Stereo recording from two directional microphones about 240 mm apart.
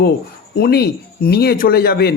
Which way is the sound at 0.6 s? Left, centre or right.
Left.